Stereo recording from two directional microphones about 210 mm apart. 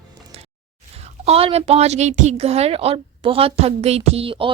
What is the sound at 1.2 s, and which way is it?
A woman's voice, 30° right (ahead or behind).